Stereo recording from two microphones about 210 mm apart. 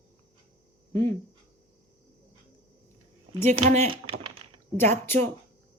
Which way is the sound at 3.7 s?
30° right (ahead or behind).